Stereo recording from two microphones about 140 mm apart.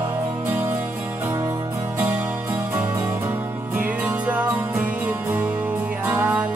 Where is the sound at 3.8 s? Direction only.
10° right (ahead or behind).